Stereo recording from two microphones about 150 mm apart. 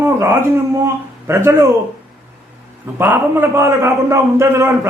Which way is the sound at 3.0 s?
15° right (ahead or behind).